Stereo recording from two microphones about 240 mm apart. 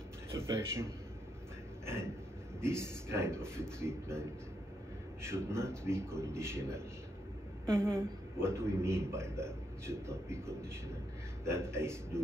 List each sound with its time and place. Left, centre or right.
0.3 s a man's voice: centre
2.6 s a man's voice: centre
7.6 s a woman's voice: centre
8.0 s a man's voice: centre